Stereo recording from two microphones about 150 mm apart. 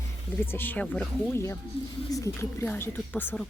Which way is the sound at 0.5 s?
10° left (ahead or behind).